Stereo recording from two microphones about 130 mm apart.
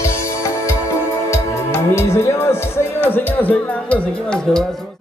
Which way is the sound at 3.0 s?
15° left (ahead or behind).